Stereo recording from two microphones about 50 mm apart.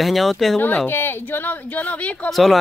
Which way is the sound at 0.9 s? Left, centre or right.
Left.